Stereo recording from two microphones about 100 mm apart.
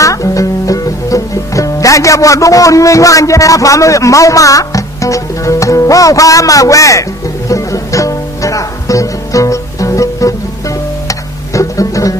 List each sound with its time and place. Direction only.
0.0 s speech: 35° left (ahead or behind)
7.4 s music: 35° left (ahead or behind)